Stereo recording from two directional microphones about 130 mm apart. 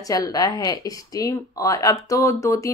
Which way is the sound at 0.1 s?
30° left (ahead or behind).